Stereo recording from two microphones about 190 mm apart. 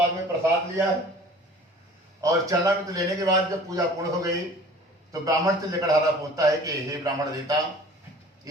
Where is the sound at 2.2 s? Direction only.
15° right (ahead or behind).